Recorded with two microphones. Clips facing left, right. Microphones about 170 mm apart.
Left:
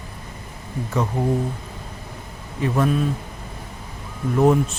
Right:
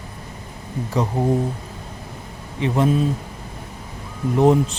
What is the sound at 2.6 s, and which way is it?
Speech, 25° right (ahead or behind).